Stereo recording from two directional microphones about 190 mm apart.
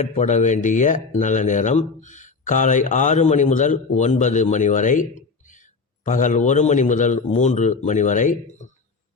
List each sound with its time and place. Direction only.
0.0 s speech: 40° left (ahead or behind)